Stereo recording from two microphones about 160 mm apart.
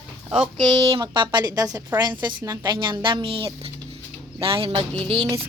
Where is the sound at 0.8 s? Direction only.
30° right (ahead or behind).